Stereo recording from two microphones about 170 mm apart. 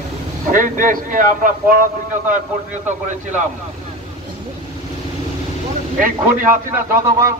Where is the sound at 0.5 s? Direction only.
50° right (ahead or behind).